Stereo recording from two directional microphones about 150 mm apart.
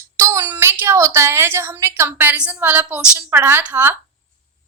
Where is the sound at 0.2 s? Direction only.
20° right (ahead or behind).